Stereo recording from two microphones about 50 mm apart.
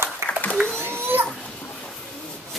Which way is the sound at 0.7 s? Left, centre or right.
Right.